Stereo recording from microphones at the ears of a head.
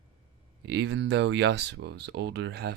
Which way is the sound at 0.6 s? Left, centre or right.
Right.